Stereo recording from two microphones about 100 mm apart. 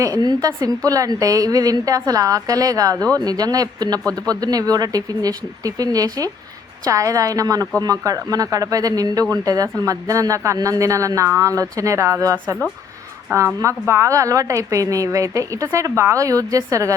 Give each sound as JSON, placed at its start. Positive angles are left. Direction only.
{"t": 0.0, "sound": "a woman's voice", "side_deg": -40}
{"t": 13.6, "sound": "a woman's voice", "side_deg": -30}